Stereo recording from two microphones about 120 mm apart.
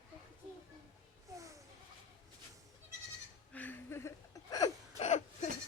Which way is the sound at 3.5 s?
15° left (ahead or behind).